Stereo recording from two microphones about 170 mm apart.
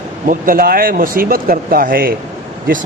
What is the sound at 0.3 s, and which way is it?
A man's voice, 55° right (ahead or behind).